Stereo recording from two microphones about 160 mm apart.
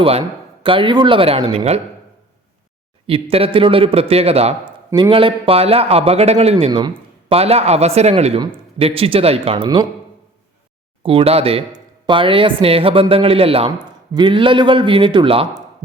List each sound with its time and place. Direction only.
0.0 s speech: 35° right (ahead or behind)
3.1 s speech: 35° right (ahead or behind)
6.7 s speech: 30° right (ahead or behind)
11.0 s speech: 35° right (ahead or behind)
13.7 s speech: 25° right (ahead or behind)